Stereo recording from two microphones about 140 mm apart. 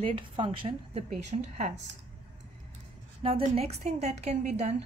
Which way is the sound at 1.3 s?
55° right (ahead or behind).